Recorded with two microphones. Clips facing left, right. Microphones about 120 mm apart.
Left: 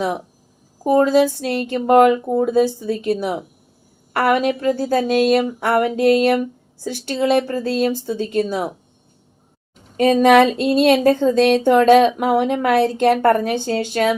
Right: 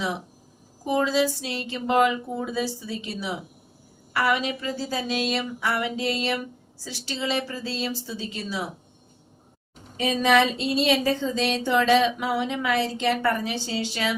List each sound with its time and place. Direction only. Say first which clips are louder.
0.9 s speech: left 9 dB; 50° left (ahead or behind)
10.0 s speech: left 9 dB; 50° left (ahead or behind)